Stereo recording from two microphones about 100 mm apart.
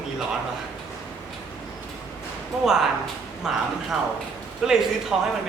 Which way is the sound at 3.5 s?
5° right (ahead or behind).